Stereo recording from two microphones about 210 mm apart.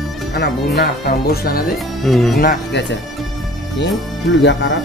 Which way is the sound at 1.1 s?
50° left (ahead or behind).